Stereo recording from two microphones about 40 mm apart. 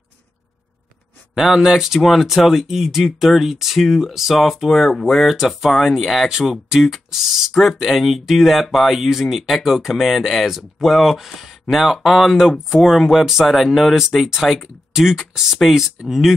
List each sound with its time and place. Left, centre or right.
1.3 s speech: centre
2.0 s speech: centre
12.4 s speech: centre
12.8 s speech: centre
13.2 s speech: centre
13.5 s speech: centre